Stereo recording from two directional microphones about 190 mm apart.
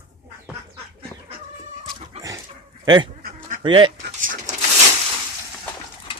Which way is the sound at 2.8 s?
25° right (ahead or behind).